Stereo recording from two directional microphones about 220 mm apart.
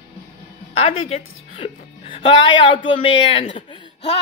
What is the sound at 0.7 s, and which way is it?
A woman's voice, 25° left (ahead or behind).